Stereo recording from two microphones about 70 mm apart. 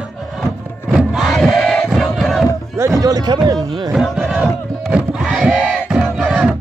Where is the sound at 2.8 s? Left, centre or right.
Right.